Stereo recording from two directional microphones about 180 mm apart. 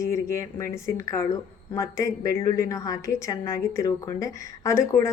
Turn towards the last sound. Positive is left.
turn(degrees=15)  # may be behind; listen again after turning